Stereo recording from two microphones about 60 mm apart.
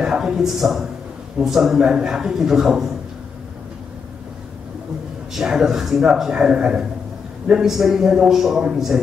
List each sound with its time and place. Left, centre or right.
0.0 s a man's voice: centre
5.3 s a man's voice: centre